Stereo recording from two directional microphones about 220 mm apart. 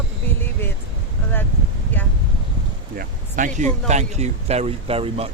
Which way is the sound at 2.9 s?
35° right (ahead or behind).